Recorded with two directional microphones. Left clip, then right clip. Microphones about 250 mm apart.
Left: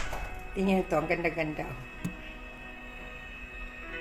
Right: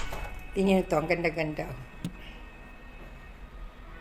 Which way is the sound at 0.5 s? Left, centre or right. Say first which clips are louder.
Right 2 dB; centre.